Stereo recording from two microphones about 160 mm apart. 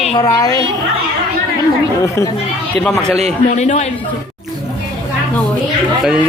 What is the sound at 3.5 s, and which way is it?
Speech, 45° left (ahead or behind).